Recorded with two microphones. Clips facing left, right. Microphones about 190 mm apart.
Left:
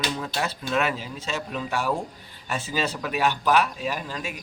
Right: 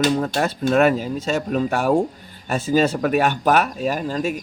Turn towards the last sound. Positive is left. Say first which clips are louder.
# right 8 dB
turn(degrees=-45)  # may be behind; listen again after turning